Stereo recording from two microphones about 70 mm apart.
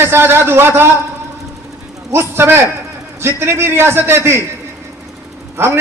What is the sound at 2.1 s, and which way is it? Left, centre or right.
A man's voice, right.